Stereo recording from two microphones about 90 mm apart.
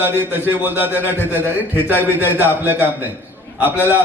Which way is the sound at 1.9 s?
20° left (ahead or behind).